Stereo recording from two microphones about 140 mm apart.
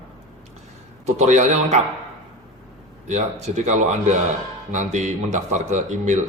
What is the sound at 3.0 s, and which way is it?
A man's voice, 55° right (ahead or behind).